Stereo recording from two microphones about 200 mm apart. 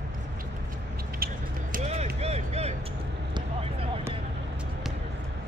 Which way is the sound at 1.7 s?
35° right (ahead or behind).